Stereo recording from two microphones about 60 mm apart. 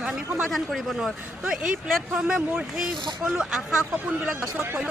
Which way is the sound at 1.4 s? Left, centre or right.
Centre.